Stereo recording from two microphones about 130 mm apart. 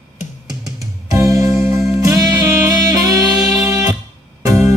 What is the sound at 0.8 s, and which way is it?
Music, 25° right (ahead or behind).